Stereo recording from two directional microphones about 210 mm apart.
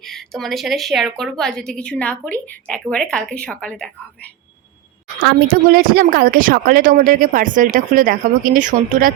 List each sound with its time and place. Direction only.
0.0 s a woman's voice: centre (ahead or behind)
5.2 s a woman's voice: 50° right (ahead or behind)